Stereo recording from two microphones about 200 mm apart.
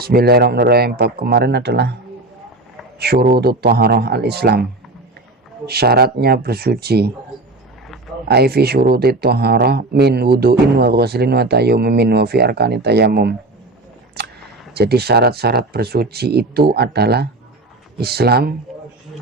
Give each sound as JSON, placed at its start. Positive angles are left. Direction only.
{"t": 0.0, "sound": "speech", "side_deg": -50}
{"t": 3.0, "sound": "speech", "side_deg": -50}
{"t": 5.6, "sound": "speech", "side_deg": -50}
{"t": 8.3, "sound": "speech", "side_deg": -55}
{"t": 14.2, "sound": "a sound", "side_deg": -55}
{"t": 14.8, "sound": "speech", "side_deg": -50}